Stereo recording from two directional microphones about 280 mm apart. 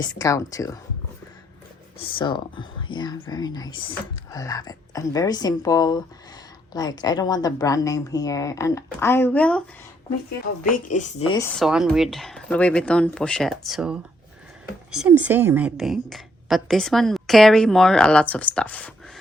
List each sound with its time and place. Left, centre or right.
0.0 s speech: centre
2.0 s speech: centre
10.7 s speech: left
11.6 s a woman's voice: centre